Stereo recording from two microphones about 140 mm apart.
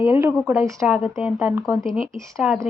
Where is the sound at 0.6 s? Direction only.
20° right (ahead or behind).